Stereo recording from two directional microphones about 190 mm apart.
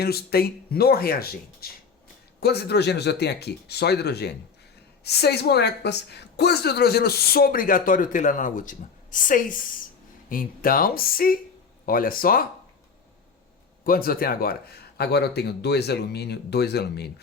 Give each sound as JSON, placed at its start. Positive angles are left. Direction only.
{"t": 0.0, "sound": "a woman's voice", "side_deg": 55}
{"t": 13.8, "sound": "a woman's voice", "side_deg": 50}